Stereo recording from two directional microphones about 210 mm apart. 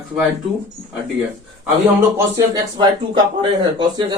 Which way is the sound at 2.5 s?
20° right (ahead or behind).